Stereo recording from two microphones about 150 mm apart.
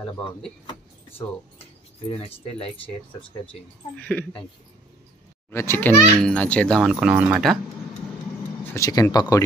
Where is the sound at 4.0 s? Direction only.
10° left (ahead or behind).